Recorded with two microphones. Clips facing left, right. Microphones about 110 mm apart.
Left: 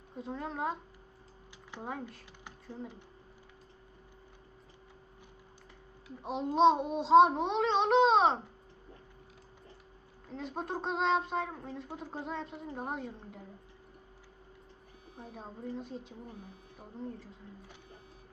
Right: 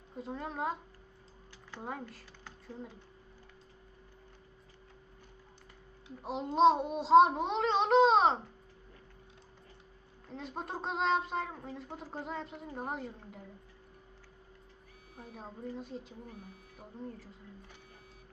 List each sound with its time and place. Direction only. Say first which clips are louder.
0.2 s speech: left 1 dB; centre (ahead or behind)
1.8 s speech: left 1 dB; centre (ahead or behind)
2.7 s speech: left 2 dB; 30° left (ahead or behind)
6.2 s speech: even; centre (ahead or behind)
10.2 s speech: left 3 dB; centre (ahead or behind)
15.2 s speech: left 1 dB; centre (ahead or behind)